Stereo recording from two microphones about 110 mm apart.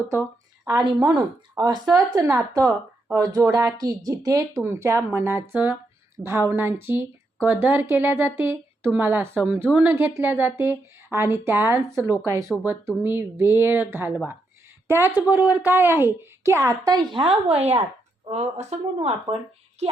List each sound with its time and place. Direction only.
0.8 s speech: 40° right (ahead or behind); by 17.7 s 65° right (ahead or behind)
18.3 s speech: 80° right
18.9 s speech: 55° right (ahead or behind)
19.8 s speech: 80° right